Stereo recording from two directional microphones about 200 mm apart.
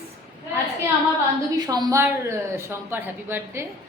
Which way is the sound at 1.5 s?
20° right (ahead or behind).